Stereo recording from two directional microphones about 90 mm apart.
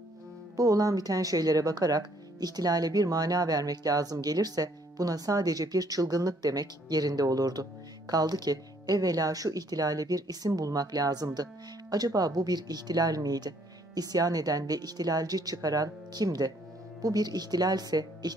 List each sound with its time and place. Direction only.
0.6 s speech: 40° right (ahead or behind)